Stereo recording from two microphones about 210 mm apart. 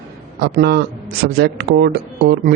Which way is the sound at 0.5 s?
50° right (ahead or behind).